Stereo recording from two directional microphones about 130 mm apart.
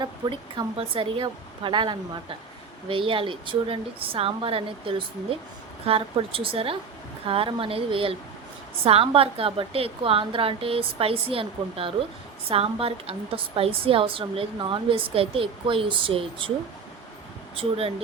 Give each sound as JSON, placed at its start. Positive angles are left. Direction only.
{"t": 0.0, "sound": "a woman's voice", "side_deg": -40}
{"t": 17.6, "sound": "a woman's voice", "side_deg": -50}